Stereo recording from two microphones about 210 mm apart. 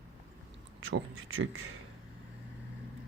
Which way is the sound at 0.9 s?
65° right (ahead or behind).